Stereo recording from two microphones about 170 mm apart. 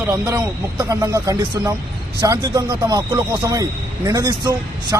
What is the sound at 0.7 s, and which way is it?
A man's voice, 15° right (ahead or behind).